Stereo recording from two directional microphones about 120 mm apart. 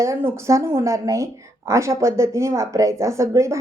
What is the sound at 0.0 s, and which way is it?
Speech, 25° right (ahead or behind).